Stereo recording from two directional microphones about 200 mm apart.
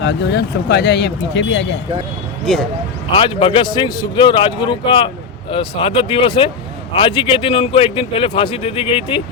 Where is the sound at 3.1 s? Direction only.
25° left (ahead or behind).